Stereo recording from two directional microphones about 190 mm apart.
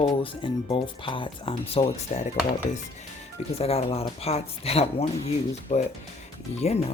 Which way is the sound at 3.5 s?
30° left (ahead or behind).